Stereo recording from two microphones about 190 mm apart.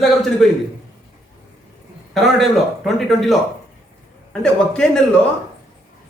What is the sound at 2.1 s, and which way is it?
Speech, centre (ahead or behind).